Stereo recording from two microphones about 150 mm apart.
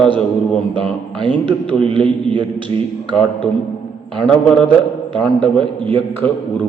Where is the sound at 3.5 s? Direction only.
10° left (ahead or behind).